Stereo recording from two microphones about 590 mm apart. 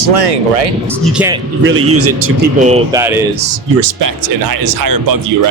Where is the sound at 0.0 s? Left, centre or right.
Right.